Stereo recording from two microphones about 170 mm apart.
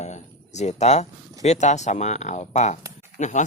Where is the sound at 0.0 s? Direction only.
40° left (ahead or behind).